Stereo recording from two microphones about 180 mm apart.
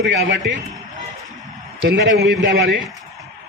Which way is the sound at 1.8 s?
65° right (ahead or behind).